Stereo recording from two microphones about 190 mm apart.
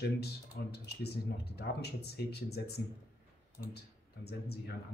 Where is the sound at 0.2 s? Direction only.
55° left (ahead or behind).